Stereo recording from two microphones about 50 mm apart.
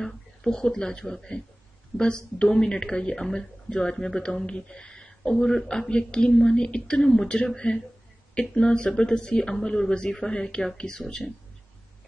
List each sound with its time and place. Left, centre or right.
0.0 s speech: centre